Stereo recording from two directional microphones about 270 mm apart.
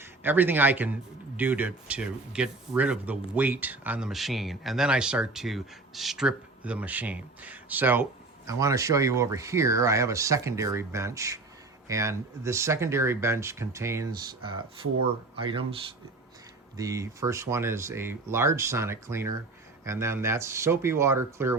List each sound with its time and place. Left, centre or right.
0.0 s a man's voice: centre
16.7 s speech: centre